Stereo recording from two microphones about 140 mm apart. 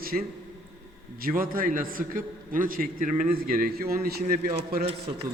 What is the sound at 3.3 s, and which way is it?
A man's voice, 90° right.